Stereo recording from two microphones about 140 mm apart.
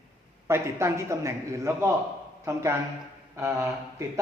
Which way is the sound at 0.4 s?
20° right (ahead or behind).